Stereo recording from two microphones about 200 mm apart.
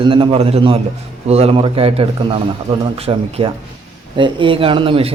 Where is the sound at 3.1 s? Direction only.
20° right (ahead or behind).